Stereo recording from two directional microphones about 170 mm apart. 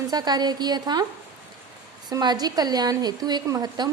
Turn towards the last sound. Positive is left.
turn(degrees=-20)  # may be behind; listen again after turning